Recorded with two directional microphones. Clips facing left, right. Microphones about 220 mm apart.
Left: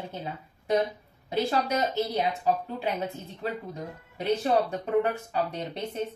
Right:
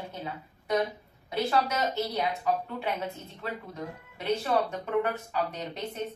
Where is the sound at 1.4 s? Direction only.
30° left (ahead or behind).